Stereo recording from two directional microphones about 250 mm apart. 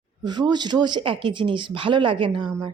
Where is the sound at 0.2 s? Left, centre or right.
Centre.